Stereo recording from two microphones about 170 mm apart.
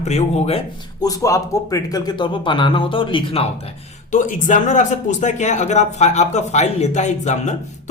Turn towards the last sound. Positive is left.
turn(degrees=45)  # may be behind; listen again after turning